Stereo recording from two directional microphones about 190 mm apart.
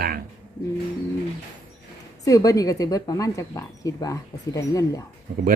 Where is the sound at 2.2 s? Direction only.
15° left (ahead or behind).